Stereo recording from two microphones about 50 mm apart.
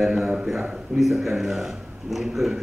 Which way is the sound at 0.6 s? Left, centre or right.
Centre.